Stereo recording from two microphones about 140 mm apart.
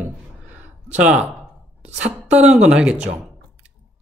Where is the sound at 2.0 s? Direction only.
55° right (ahead or behind).